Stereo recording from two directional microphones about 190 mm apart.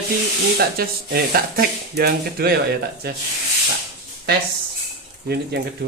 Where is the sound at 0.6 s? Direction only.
55° right (ahead or behind).